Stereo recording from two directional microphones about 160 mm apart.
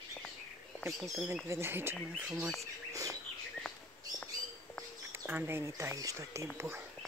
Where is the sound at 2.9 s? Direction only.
20° right (ahead or behind).